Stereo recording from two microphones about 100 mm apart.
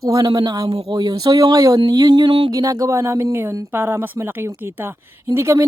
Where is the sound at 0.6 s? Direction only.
75° right (ahead or behind).